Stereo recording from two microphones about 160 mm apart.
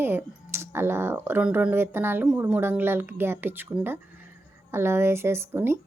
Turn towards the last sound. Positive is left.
turn(degrees=-15)  # may be behind; listen again after turning